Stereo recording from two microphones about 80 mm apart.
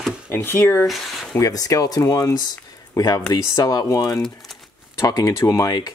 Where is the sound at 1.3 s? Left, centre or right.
Left.